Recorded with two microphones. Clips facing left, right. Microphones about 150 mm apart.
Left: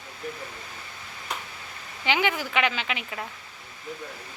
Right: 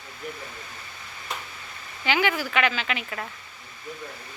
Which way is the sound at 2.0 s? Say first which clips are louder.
Right 1 dB; 20° left (ahead or behind).